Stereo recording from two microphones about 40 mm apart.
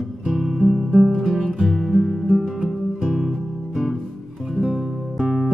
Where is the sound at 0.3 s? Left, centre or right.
Centre.